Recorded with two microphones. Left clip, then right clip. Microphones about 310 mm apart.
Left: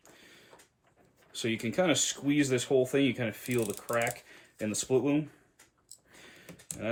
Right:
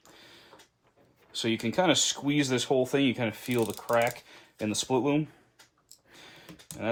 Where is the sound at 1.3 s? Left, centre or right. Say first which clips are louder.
Right 3 dB; centre.